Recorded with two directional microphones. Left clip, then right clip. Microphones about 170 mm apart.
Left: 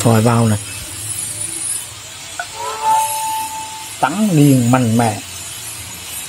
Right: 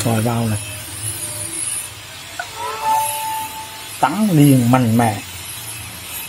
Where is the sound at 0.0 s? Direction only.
50° left (ahead or behind).